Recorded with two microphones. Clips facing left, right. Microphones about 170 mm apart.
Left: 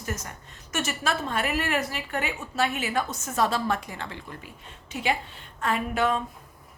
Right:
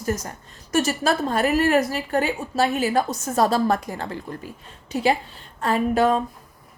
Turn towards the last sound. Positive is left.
turn(degrees=-35)  # may be behind; listen again after turning